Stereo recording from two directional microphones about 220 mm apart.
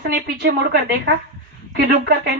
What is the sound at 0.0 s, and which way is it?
Speech, 45° right (ahead or behind).